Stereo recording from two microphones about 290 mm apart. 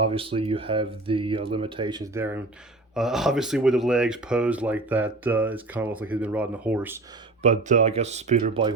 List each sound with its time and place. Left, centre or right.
0.0 s speech: centre
7.4 s speech: right